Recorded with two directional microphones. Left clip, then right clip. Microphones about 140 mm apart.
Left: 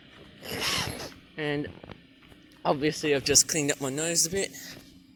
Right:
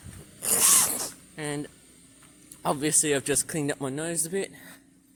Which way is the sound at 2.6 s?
40° right (ahead or behind).